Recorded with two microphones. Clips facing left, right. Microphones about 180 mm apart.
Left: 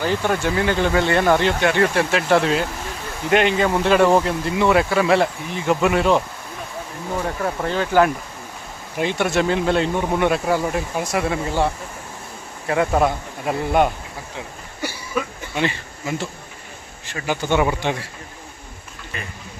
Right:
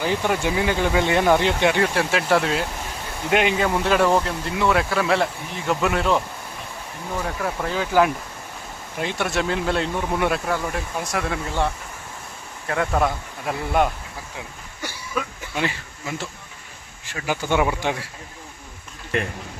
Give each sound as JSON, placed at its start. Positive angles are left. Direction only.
{"t": 0.0, "sound": "speech", "side_deg": -10}
{"t": 7.7, "sound": "speech", "side_deg": -5}
{"t": 10.4, "sound": "speech", "side_deg": 15}
{"t": 11.0, "sound": "speech", "side_deg": 5}
{"t": 14.8, "sound": "insect", "side_deg": 0}
{"t": 17.1, "sound": "speech", "side_deg": -5}
{"t": 19.1, "sound": "speech", "side_deg": -75}